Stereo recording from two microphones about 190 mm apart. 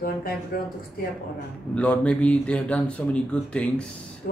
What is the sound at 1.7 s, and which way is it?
Speech, 5° left (ahead or behind).